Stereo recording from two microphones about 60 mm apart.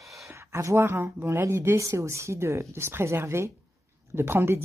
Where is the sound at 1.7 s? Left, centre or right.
Right.